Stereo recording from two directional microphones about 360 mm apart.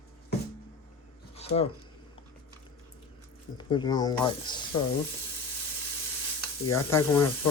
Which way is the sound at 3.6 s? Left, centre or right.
Centre.